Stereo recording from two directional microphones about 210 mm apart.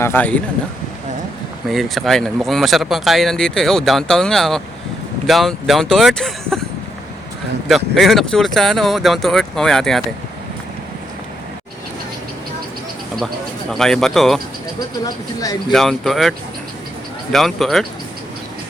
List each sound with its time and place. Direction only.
0.0 s speech: 10° left (ahead or behind)
1.6 s speech: centre (ahead or behind)
7.9 s speech: centre (ahead or behind)
13.7 s speech: centre (ahead or behind)
14.8 s speech: 15° left (ahead or behind)
15.7 s speech: centre (ahead or behind)
17.3 s speech: centre (ahead or behind)